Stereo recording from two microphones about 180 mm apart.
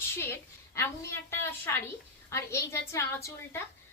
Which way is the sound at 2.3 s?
15° left (ahead or behind).